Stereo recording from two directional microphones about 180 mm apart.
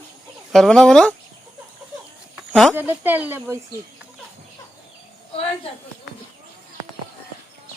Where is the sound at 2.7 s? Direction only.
10° right (ahead or behind).